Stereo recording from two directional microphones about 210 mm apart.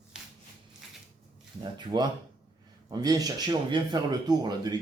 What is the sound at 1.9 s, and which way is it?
A man's voice, 20° right (ahead or behind).